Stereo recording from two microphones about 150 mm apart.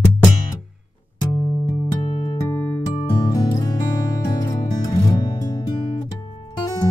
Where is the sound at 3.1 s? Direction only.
25° left (ahead or behind).